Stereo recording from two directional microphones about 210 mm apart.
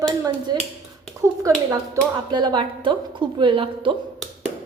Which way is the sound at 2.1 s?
20° right (ahead or behind).